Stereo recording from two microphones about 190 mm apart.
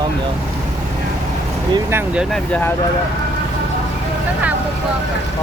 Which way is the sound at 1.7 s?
10° right (ahead or behind).